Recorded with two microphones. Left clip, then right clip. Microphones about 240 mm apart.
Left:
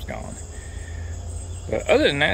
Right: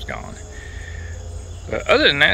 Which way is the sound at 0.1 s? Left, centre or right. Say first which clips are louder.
Right 3 dB; centre.